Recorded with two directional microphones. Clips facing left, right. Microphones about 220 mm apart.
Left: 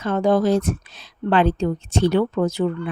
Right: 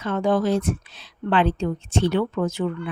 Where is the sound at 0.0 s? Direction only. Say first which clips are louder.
Left 3 dB; 40° left (ahead or behind).